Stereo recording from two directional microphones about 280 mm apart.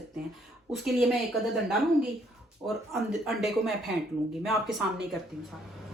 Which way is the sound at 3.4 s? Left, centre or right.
Centre.